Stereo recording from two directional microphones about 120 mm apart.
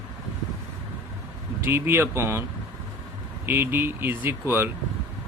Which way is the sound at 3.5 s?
20° right (ahead or behind).